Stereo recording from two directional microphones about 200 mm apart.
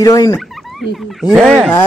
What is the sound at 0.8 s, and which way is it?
Speech, centre (ahead or behind).